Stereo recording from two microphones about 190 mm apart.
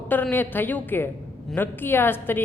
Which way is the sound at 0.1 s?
10° left (ahead or behind).